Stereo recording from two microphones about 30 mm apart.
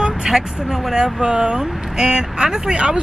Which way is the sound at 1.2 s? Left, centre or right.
Right.